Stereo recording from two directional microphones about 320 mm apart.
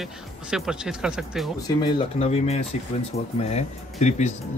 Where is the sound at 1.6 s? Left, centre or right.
Centre.